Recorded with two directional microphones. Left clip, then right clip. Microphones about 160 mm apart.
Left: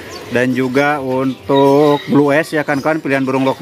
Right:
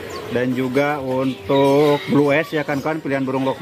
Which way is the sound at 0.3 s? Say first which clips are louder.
Left 6 dB; 20° left (ahead or behind).